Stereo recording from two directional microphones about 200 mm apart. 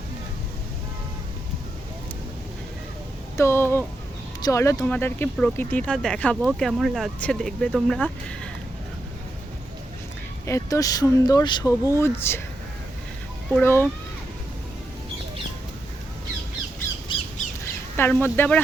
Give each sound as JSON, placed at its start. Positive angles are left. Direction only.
{"t": 3.3, "sound": "speech", "side_deg": 15}
{"t": 10.4, "sound": "speech", "side_deg": 15}
{"t": 13.5, "sound": "speech", "side_deg": 10}
{"t": 17.1, "sound": "squawk", "side_deg": 25}
{"t": 17.9, "sound": "speech", "side_deg": 10}